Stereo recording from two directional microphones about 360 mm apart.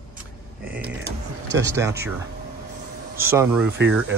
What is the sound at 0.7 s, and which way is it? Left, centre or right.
Speech, centre.